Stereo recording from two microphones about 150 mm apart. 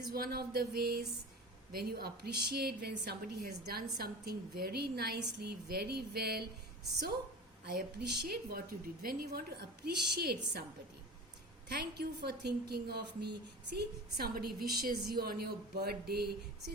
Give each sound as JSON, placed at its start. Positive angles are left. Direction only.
{"t": 0.1, "sound": "a woman's voice", "side_deg": -90}
{"t": 7.6, "sound": "a woman's voice", "side_deg": -90}
{"t": 11.7, "sound": "a woman's voice", "side_deg": -90}